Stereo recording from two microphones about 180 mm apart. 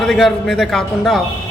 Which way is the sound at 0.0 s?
Centre (ahead or behind).